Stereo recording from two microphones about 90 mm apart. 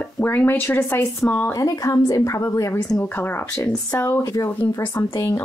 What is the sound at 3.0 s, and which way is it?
Speech, 20° left (ahead or behind).